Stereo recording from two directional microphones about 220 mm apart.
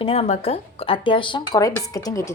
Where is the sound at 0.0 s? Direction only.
25° left (ahead or behind).